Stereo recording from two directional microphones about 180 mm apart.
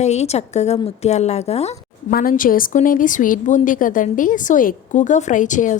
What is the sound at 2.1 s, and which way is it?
A woman's voice, 50° left (ahead or behind).